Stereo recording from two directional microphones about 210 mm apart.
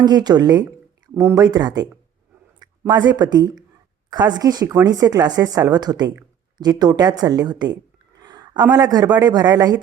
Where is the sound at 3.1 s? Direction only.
20° right (ahead or behind).